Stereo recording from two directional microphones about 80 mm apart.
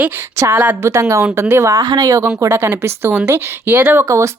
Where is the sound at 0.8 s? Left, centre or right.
Right.